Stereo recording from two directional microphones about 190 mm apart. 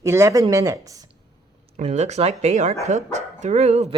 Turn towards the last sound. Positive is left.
turn(degrees=-35)  # may be behind; listen again after turning